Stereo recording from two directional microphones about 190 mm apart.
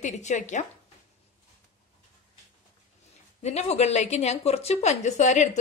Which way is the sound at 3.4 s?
35° left (ahead or behind).